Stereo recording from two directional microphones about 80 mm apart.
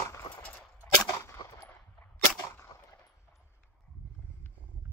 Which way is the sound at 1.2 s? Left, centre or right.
Left.